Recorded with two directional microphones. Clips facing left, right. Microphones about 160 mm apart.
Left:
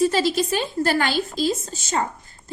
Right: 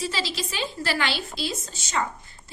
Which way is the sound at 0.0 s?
50° left (ahead or behind).